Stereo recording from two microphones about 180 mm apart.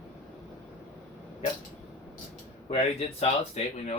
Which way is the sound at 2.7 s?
35° left (ahead or behind).